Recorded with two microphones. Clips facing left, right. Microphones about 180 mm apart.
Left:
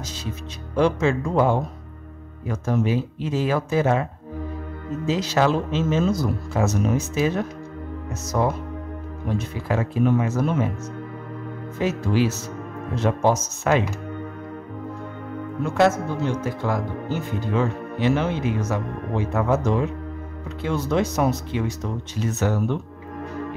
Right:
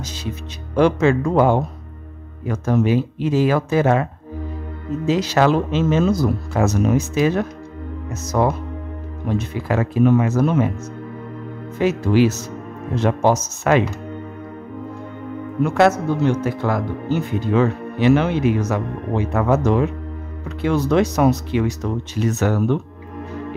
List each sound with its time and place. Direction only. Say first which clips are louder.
0.7 s speech: right 4 dB; 70° right (ahead or behind)
9.7 s speech: right 5 dB; 70° right (ahead or behind)
11.8 s speech: right 6 dB; 70° right (ahead or behind)
15.6 s speech: right 4 dB; 70° right (ahead or behind)